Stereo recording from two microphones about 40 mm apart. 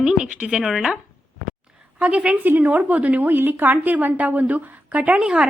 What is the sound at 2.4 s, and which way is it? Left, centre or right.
A woman's voice, right.